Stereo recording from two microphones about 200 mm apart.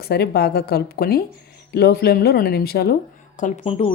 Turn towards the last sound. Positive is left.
turn(degrees=35)  # may be behind; listen again after turning